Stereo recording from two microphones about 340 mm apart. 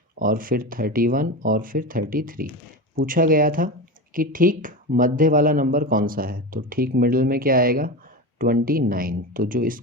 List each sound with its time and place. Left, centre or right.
0.2 s speech: right